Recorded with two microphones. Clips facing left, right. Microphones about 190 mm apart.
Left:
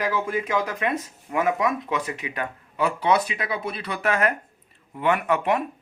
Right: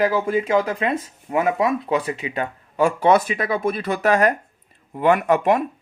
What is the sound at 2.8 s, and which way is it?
Speech, 45° right (ahead or behind).